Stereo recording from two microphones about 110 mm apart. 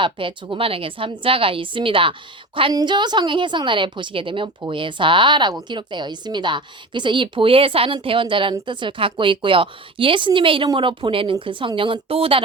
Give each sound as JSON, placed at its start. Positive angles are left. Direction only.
{"t": 0.0, "sound": "a woman's voice", "side_deg": -50}